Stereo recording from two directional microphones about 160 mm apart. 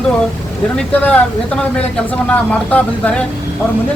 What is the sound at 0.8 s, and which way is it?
Speech, 10° left (ahead or behind).